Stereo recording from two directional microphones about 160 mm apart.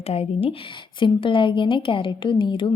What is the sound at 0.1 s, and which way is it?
A woman's voice, 40° left (ahead or behind).